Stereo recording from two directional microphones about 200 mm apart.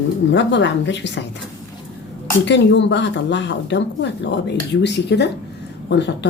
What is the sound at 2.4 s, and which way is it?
Speech, 65° left (ahead or behind).